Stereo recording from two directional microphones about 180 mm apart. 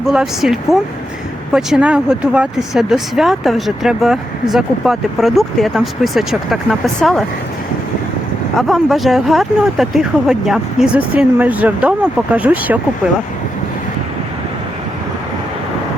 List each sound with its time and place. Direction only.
0.0 s speech: 5° right (ahead or behind)
8.5 s speech: centre (ahead or behind)